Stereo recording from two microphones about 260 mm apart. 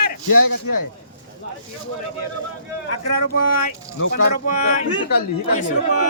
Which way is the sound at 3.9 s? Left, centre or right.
Left.